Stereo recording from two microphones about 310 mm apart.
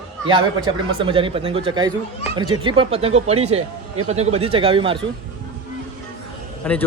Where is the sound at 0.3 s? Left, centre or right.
Centre.